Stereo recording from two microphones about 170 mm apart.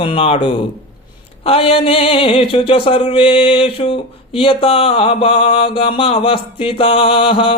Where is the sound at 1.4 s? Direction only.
35° left (ahead or behind).